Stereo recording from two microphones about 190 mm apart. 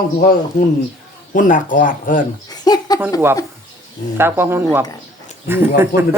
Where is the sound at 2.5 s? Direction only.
20° left (ahead or behind).